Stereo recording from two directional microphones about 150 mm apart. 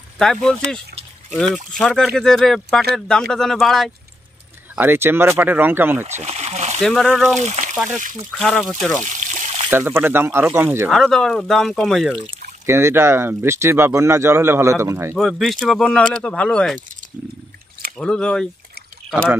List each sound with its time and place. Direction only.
0.2 s speech: 5° left (ahead or behind)
4.7 s speech: 15° right (ahead or behind)
6.0 s a sound: 45° right (ahead or behind)
6.8 s speech: 5° left (ahead or behind)
7.3 s speech: 50° right (ahead or behind)
8.4 s speech: 5° left (ahead or behind)
9.0 s trickle: 55° right (ahead or behind)
9.7 s speech: 15° right (ahead or behind)
10.9 s speech: 5° left (ahead or behind)
12.6 s speech: 15° right (ahead or behind)
15.1 s speech: centre (ahead or behind)
17.9 s speech: 5° left (ahead or behind)